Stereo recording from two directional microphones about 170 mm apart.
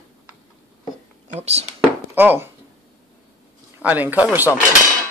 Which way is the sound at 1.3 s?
40° right (ahead or behind).